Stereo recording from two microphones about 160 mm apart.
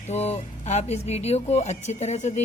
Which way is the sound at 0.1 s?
45° left (ahead or behind).